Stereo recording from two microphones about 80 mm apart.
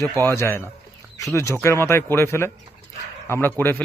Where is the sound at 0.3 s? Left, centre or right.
Left.